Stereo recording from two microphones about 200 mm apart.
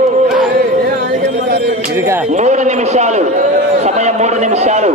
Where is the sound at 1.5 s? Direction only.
50° right (ahead or behind).